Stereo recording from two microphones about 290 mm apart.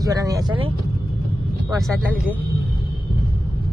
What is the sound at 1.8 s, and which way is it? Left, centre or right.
Speech, centre.